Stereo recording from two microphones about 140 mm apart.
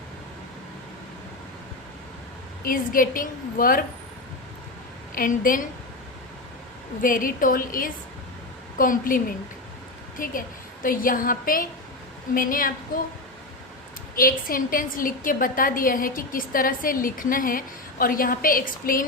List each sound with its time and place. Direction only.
2.6 s a woman's voice: 80° left
5.1 s a woman's voice: 85° left
7.0 s a woman's voice: 75° left (ahead or behind)
14.2 s a woman's voice: 90° left